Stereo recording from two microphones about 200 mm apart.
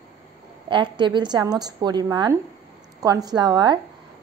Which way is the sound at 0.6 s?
25° right (ahead or behind).